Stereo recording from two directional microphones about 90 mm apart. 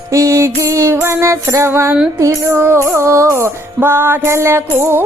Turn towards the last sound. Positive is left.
turn(degrees=-25)  # may be behind; listen again after turning